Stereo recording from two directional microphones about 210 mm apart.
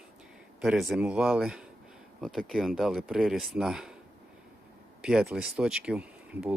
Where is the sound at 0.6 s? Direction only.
Centre (ahead or behind).